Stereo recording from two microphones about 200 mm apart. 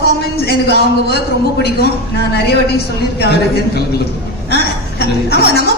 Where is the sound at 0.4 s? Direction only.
55° left (ahead or behind).